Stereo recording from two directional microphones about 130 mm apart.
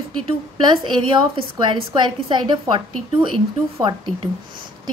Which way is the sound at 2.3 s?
40° right (ahead or behind).